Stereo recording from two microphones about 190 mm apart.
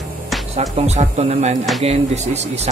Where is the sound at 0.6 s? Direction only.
35° right (ahead or behind).